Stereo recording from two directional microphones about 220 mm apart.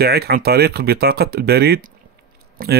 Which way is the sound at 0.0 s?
45° right (ahead or behind).